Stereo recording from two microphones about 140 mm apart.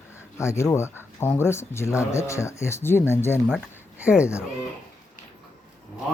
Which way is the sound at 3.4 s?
5° right (ahead or behind).